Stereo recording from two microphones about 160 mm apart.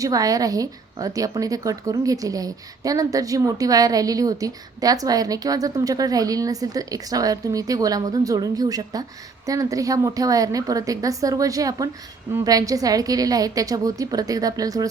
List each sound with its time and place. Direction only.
0.0 s a woman's voice: 20° right (ahead or behind)